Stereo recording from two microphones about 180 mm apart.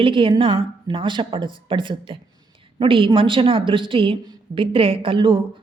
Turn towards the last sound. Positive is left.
turn(degrees=-30)  # may be behind; listen again after turning